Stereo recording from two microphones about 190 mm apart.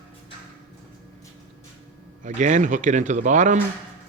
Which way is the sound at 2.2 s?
40° right (ahead or behind).